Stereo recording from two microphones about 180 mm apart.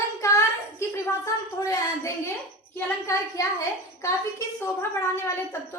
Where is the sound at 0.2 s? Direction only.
15° left (ahead or behind).